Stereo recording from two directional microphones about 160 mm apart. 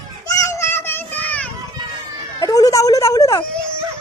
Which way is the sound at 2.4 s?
20° left (ahead or behind).